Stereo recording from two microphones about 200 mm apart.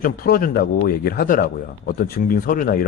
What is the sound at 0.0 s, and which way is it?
Speech, 45° left (ahead or behind).